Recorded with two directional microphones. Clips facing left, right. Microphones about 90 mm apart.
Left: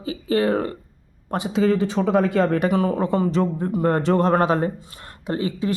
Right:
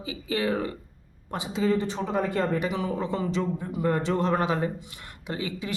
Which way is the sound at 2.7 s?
50° left (ahead or behind).